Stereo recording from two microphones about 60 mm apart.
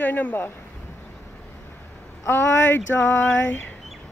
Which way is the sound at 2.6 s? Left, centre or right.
Left.